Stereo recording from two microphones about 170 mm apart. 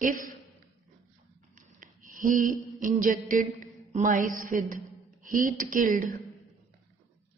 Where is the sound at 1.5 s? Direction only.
50° right (ahead or behind).